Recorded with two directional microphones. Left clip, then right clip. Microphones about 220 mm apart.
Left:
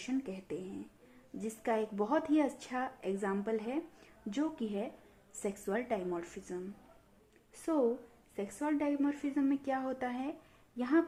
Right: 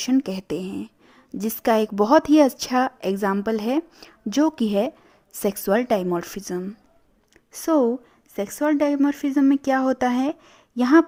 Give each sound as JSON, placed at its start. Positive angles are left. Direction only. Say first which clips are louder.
{"t": 0.0, "sound": "a woman's voice", "louder": "right 16 dB", "side_deg": -45}